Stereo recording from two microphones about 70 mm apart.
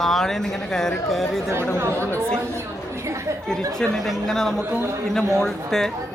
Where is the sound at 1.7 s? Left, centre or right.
Right.